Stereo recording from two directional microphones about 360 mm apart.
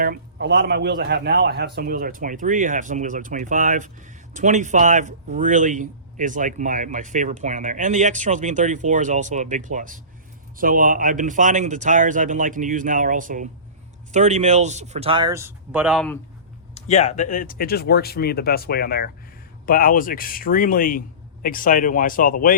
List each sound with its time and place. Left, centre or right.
0.0 s speech: right; by 16.1 s centre
16.7 s speech: centre